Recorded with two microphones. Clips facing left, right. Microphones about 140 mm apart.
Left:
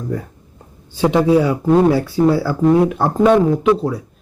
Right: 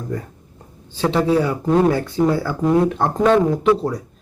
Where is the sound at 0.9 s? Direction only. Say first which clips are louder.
Left 4 dB; 15° left (ahead or behind).